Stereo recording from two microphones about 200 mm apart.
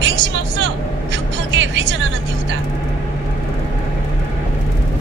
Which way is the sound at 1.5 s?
65° right (ahead or behind).